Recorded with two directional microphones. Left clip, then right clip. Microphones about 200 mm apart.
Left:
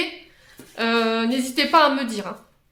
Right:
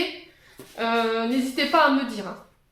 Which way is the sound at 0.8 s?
45° left (ahead or behind).